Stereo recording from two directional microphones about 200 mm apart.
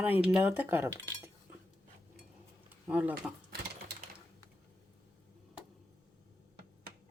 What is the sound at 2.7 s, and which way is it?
Speech, 10° right (ahead or behind).